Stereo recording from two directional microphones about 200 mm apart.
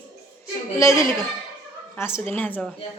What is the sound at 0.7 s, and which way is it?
A woman's voice, 15° left (ahead or behind).